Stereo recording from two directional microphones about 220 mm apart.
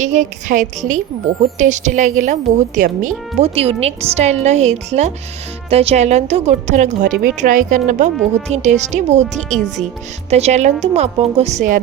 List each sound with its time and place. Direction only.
0.0 s a woman's voice: 35° right (ahead or behind)
8.2 s speech: centre (ahead or behind)
8.5 s a woman's voice: 30° right (ahead or behind)